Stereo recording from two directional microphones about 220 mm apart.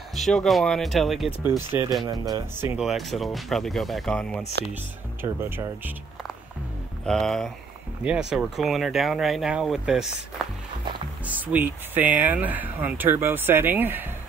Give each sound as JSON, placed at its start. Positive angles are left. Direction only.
{"t": 0.1, "sound": "speech", "side_deg": 0}
{"t": 2.0, "sound": "speech", "side_deg": -15}
{"t": 2.8, "sound": "speech", "side_deg": 0}
{"t": 5.2, "sound": "speech", "side_deg": -10}
{"t": 7.1, "sound": "speech", "side_deg": 0}
{"t": 11.2, "sound": "speech", "side_deg": -5}